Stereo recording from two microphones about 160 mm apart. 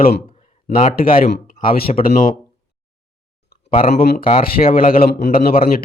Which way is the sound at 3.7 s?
40° left (ahead or behind).